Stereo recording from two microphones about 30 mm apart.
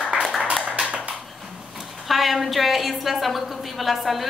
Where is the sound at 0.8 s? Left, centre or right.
Right.